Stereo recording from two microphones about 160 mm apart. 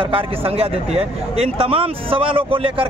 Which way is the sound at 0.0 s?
35° right (ahead or behind).